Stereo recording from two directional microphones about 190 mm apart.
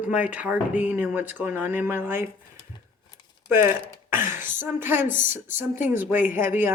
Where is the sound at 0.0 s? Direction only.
10° right (ahead or behind).